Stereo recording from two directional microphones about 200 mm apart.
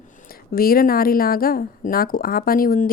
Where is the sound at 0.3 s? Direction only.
45° left (ahead or behind).